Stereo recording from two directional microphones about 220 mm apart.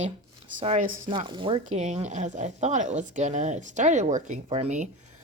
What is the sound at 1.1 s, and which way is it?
Speech, 20° right (ahead or behind).